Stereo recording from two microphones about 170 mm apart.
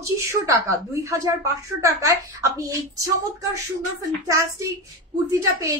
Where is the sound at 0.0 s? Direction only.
15° right (ahead or behind).